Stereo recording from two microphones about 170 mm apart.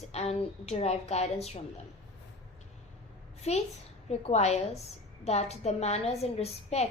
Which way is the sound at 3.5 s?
40° left (ahead or behind).